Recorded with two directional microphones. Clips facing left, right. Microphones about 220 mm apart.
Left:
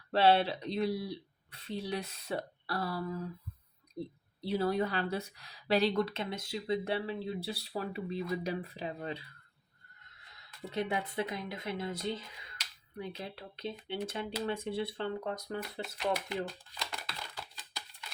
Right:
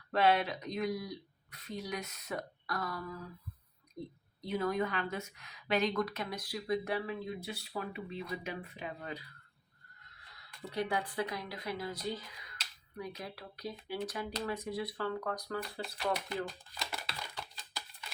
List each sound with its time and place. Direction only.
0.1 s speech: 30° left (ahead or behind)
10.3 s speech: 25° left (ahead or behind)
16.7 s a sound: centre (ahead or behind)